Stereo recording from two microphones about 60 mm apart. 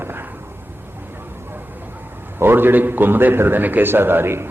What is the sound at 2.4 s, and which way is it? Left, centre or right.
A man's voice, right.